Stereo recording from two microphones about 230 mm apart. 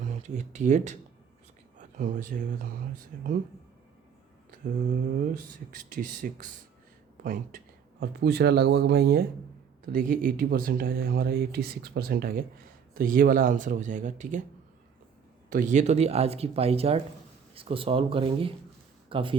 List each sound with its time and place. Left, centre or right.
0.1 s speech: right
5.3 s speech: right
15.4 s speech: right